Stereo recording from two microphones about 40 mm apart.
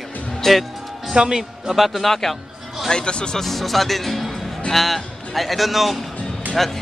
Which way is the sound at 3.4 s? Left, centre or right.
Centre.